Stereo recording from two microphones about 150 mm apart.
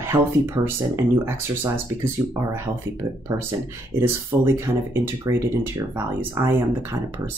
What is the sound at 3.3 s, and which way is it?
Speech, 20° right (ahead or behind).